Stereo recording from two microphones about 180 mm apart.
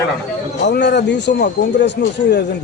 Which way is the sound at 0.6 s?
70° left (ahead or behind).